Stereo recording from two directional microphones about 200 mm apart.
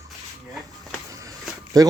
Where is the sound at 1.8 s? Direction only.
20° right (ahead or behind).